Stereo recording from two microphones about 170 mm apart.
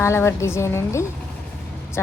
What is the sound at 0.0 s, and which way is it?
A woman's voice, 15° left (ahead or behind).